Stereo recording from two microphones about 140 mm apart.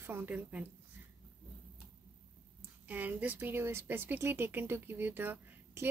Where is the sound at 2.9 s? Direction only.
10° right (ahead or behind).